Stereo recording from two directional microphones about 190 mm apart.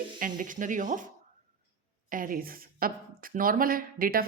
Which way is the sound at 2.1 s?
45° right (ahead or behind).